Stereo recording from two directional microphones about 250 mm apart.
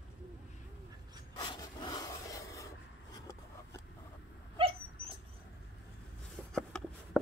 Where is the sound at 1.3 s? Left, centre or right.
Centre.